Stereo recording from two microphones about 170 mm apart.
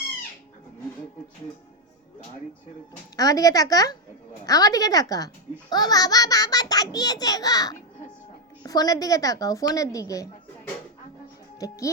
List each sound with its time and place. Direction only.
3.2 s a child's voice: 20° left (ahead or behind)
11.6 s a child's voice: 20° left (ahead or behind)